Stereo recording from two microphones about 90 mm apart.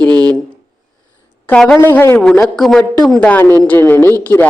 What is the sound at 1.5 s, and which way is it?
Speech, 10° left (ahead or behind).